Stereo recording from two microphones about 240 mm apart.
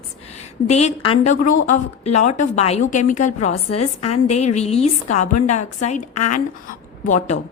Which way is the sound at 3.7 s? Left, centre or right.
Left.